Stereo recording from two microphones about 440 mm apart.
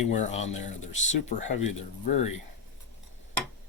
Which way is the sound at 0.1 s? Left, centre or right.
Centre.